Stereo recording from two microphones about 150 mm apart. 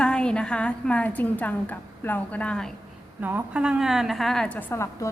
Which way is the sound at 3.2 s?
10° right (ahead or behind).